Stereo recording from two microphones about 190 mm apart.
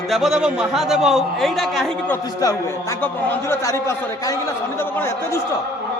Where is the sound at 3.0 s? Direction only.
10° left (ahead or behind).